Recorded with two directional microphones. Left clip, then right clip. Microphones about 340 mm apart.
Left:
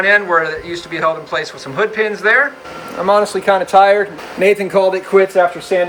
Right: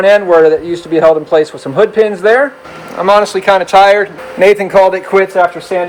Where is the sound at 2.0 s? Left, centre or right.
Right.